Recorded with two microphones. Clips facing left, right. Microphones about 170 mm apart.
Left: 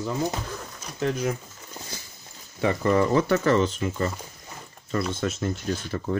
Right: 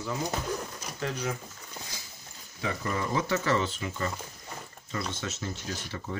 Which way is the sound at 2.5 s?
70° left (ahead or behind).